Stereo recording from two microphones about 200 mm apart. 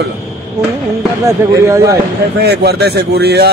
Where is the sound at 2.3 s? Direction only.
55° right (ahead or behind).